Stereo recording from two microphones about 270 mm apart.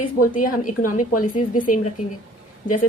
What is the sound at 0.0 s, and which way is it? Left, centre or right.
A woman's voice, left.